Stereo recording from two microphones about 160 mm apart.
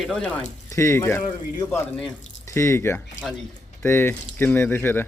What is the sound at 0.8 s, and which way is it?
A man's voice, 15° left (ahead or behind).